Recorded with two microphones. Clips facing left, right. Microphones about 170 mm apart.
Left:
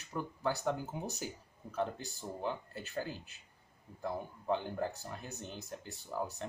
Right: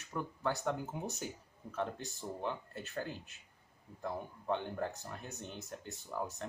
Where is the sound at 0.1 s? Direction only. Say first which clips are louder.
Even; 10° left (ahead or behind).